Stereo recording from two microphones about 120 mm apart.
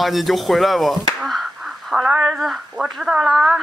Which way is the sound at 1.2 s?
5° right (ahead or behind).